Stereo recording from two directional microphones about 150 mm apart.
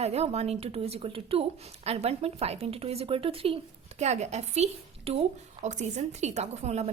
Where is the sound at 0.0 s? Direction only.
45° right (ahead or behind).